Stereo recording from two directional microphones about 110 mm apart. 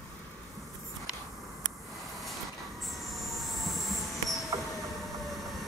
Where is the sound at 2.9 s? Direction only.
Centre (ahead or behind).